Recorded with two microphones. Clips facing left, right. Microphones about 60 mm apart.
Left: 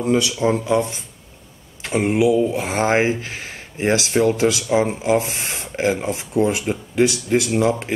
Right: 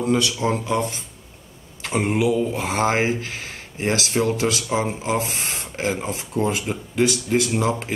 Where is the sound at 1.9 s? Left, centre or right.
Left.